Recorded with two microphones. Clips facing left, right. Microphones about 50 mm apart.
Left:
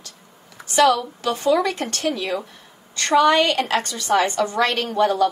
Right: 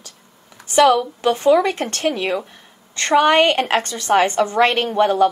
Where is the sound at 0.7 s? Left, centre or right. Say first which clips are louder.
Right 3 dB; right.